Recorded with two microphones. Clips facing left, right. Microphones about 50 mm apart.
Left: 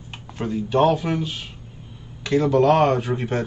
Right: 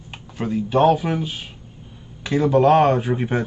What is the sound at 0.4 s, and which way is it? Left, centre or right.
Speech, centre.